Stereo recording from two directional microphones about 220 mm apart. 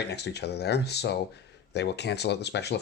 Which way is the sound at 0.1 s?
50° left (ahead or behind).